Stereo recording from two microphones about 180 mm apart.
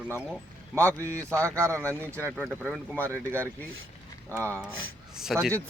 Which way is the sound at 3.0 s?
15° right (ahead or behind).